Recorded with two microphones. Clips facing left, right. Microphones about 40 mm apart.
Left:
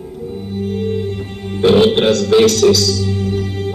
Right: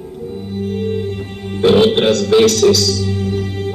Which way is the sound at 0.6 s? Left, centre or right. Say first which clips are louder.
Even; centre.